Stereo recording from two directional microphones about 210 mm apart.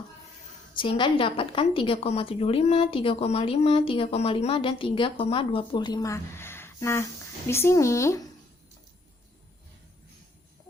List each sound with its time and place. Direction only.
0.8 s a woman's voice: 25° left (ahead or behind)